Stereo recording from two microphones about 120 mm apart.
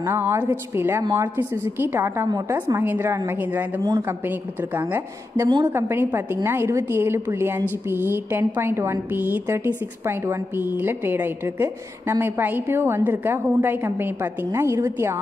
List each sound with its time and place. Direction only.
0.0 s a woman's voice: 20° right (ahead or behind)